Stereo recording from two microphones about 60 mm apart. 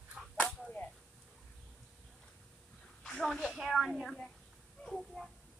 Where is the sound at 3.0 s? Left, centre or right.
Centre.